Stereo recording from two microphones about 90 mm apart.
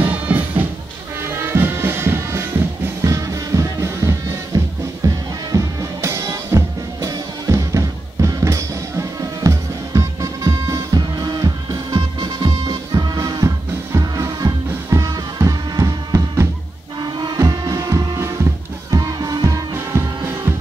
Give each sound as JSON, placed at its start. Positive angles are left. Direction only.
{"t": 0.0, "sound": "music", "side_deg": -20}
{"t": 17.0, "sound": "music", "side_deg": -55}
{"t": 17.4, "sound": "music", "side_deg": -40}
{"t": 19.4, "sound": "music", "side_deg": -35}